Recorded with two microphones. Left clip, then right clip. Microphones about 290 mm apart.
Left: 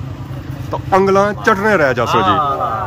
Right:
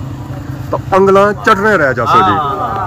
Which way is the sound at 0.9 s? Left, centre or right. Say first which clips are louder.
Right 4 dB; centre.